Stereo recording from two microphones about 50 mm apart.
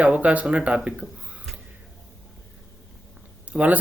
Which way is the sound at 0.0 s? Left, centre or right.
Right.